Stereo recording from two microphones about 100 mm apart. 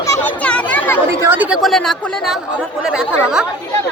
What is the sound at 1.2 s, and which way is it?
Speech, 20° right (ahead or behind).